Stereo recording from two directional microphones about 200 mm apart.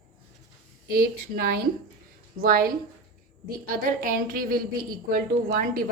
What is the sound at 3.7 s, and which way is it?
A woman's voice, 45° right (ahead or behind).